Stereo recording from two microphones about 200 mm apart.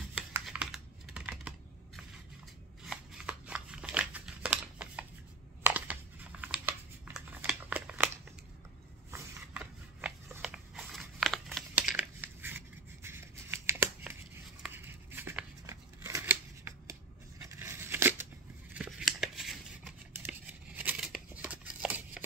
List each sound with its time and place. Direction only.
0.3 s computer keyboard: 5° right (ahead or behind)
2.8 s shuffling cards: 5° right (ahead or behind)
5.6 s a sound: 10° right (ahead or behind)
10.0 s crumpling: 5° right (ahead or behind)
14.6 s a sound: 10° right (ahead or behind)
17.4 s scissors: 10° right (ahead or behind)